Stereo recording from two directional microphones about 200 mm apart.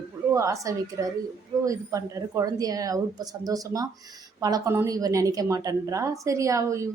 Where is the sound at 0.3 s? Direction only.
15° right (ahead or behind).